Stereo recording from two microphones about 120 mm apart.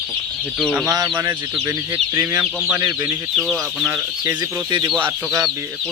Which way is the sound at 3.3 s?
Centre (ahead or behind).